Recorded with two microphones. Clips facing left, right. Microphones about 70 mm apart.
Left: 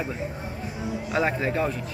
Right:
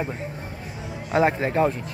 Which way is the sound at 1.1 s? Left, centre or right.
Right.